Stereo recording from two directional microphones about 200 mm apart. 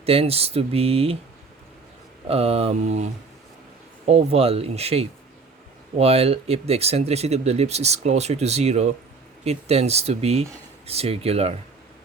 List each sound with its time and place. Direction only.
0.0 s speech: 30° right (ahead or behind)
2.2 s speech: 30° right (ahead or behind)